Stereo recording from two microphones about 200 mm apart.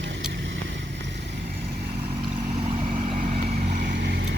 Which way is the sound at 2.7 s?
35° right (ahead or behind).